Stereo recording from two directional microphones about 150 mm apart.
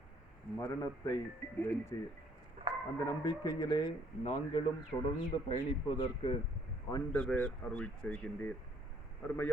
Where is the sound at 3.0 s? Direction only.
25° left (ahead or behind).